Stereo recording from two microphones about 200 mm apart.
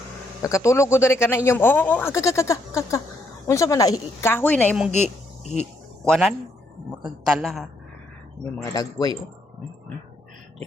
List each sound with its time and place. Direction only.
0.4 s speech: 15° left (ahead or behind)
5.0 s insect: centre (ahead or behind)
6.1 s a woman's voice: centre (ahead or behind)
8.7 s speech: 20° left (ahead or behind)